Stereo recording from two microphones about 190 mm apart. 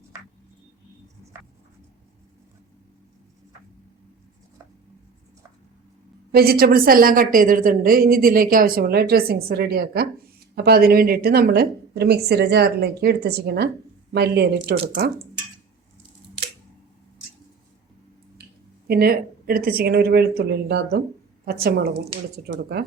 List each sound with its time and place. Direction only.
1.3 s writing: 15° right (ahead or behind)
6.3 s a woman's voice: 55° right (ahead or behind)
18.9 s a woman's voice: 55° right (ahead or behind)
22.5 s a woman's voice: 65° right (ahead or behind)